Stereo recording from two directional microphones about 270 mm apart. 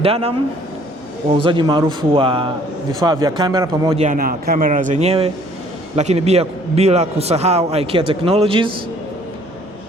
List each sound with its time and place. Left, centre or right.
0.0 s a man's voice: right